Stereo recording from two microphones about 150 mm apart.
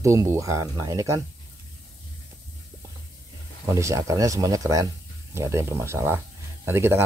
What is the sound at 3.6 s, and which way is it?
Speech, 20° right (ahead or behind).